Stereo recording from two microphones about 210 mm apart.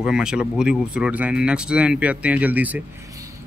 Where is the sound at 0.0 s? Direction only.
5° right (ahead or behind).